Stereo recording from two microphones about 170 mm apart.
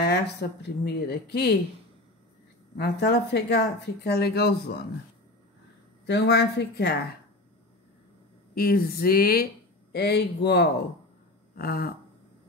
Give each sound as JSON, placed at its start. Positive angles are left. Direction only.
{"t": 0.0, "sound": "speech", "side_deg": 75}
{"t": 2.8, "sound": "speech", "side_deg": 80}
{"t": 6.0, "sound": "speech", "side_deg": 75}
{"t": 8.5, "sound": "speech", "side_deg": 60}
{"t": 9.9, "sound": "speech", "side_deg": 70}
{"t": 11.5, "sound": "a sound", "side_deg": 60}